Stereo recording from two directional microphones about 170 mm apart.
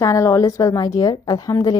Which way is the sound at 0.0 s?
20° left (ahead or behind).